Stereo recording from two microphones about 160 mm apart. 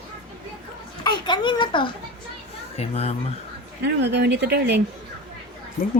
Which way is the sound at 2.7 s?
40° left (ahead or behind).